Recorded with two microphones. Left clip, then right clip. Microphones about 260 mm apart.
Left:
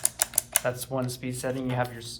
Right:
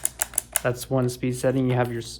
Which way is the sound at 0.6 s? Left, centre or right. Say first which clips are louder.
Right 8 dB; right.